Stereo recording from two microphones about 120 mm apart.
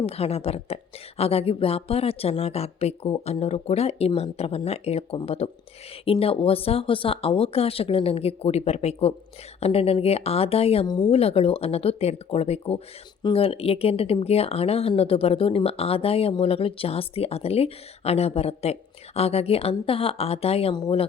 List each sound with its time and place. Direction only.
0.0 s speech: 55° left (ahead or behind)
10.8 s speech: 35° left (ahead or behind)
11.1 s speech: 55° left (ahead or behind)